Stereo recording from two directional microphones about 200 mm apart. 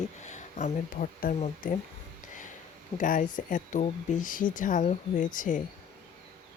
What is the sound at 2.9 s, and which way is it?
Speech, 40° left (ahead or behind).